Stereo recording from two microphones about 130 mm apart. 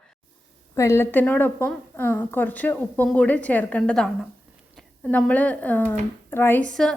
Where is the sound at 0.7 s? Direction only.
20° left (ahead or behind).